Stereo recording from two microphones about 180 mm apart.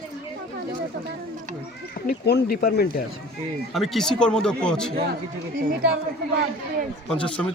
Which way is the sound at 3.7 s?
Centre (ahead or behind).